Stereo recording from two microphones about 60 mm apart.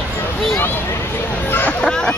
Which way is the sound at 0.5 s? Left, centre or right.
Left.